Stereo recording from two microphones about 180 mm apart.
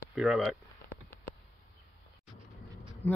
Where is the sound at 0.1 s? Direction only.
Centre (ahead or behind).